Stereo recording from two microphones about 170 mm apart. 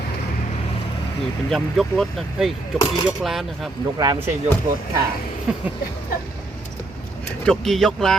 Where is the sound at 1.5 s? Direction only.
Centre (ahead or behind).